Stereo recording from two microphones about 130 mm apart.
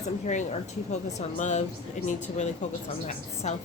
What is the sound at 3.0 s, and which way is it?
Speech, 60° left (ahead or behind).